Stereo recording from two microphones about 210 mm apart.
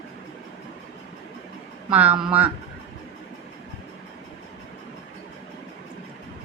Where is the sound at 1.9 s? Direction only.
5° right (ahead or behind).